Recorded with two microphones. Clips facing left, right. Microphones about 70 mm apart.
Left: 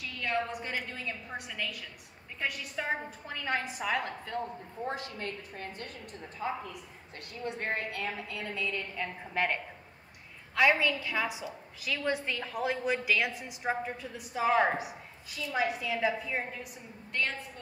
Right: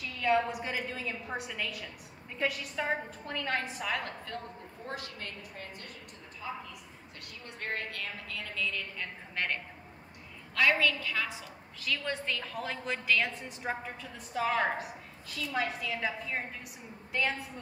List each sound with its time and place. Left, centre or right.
0.0 s a woman's voice: centre
3.3 s a woman's voice: centre; by 6.6 s left
7.4 s a woman's voice: left; by 16.4 s centre
17.1 s a woman's voice: centre